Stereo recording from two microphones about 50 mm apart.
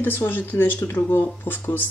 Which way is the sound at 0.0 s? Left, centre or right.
Left.